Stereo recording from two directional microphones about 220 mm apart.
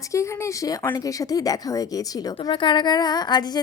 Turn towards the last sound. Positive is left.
turn(degrees=20)  # may be behind; listen again after turning